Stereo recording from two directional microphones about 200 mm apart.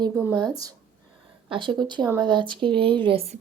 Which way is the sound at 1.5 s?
25° right (ahead or behind).